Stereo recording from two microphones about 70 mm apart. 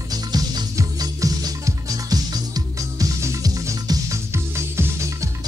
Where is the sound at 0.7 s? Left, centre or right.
Right.